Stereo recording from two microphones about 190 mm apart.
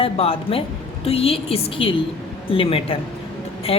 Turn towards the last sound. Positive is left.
turn(degrees=30)  # may be behind; listen again after turning